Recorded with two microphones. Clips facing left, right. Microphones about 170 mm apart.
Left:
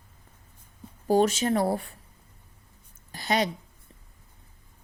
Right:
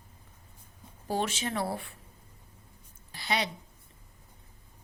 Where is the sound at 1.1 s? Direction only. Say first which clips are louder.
Left 9 dB; 40° left (ahead or behind).